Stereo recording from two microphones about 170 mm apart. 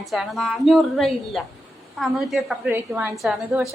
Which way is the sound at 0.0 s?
Centre (ahead or behind).